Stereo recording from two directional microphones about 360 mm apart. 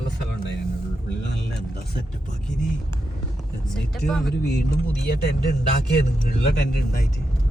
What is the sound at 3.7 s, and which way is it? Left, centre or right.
Speech, centre.